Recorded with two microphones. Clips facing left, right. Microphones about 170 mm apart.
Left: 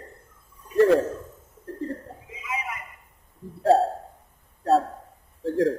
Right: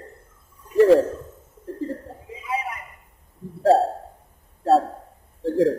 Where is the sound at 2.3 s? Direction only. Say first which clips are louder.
Right 5 dB; 35° right (ahead or behind).